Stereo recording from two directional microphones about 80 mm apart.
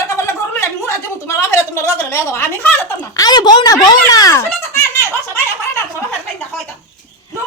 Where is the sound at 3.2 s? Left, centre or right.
Left.